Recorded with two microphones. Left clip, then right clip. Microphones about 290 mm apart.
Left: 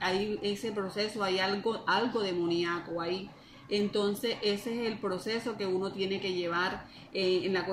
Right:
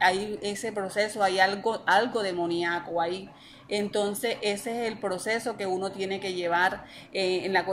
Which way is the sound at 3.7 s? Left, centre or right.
Right.